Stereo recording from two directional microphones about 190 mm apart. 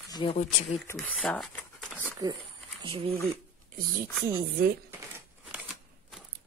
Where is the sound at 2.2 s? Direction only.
20° right (ahead or behind).